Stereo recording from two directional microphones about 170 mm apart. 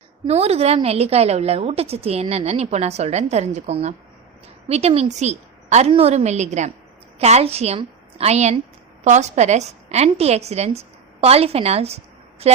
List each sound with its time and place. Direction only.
0.3 s a woman's voice: 40° right (ahead or behind)